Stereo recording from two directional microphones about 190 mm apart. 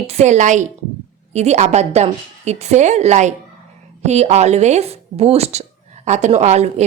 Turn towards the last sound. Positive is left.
turn(degrees=-35)  # may be behind; listen again after turning